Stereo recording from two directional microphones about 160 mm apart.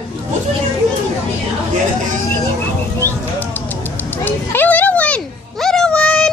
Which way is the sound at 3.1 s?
10° left (ahead or behind).